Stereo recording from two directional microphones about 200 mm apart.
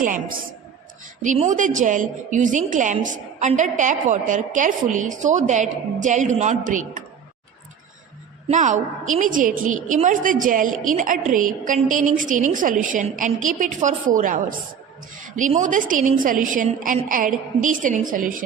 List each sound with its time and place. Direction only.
0.0 s a woman's voice: 40° right (ahead or behind)
8.4 s a woman's voice: 35° right (ahead or behind)